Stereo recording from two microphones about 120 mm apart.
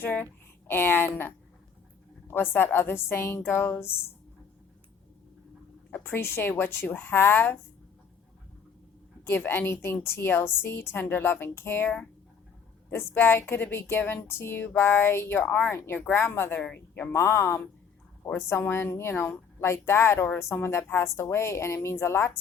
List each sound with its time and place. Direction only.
0.0 s speech: 15° left (ahead or behind)
2.3 s speech: 15° left (ahead or behind)
5.9 s speech: 15° left (ahead or behind)
9.2 s speech: 20° left (ahead or behind)